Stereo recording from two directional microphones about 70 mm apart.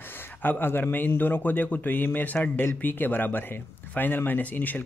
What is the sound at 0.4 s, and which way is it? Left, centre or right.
Speech, left.